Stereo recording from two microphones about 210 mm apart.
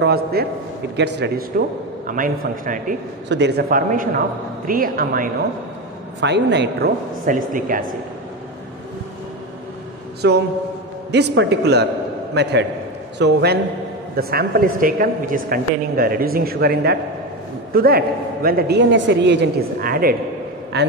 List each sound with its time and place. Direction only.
0.0 s a man's voice: 50° right (ahead or behind)
2.0 s a man's voice: 40° right (ahead or behind)
3.3 s a man's voice: 55° right (ahead or behind)
6.2 s a man's voice: 55° right (ahead or behind)
7.2 s a man's voice: 40° right (ahead or behind)
10.2 s speech: 50° right (ahead or behind)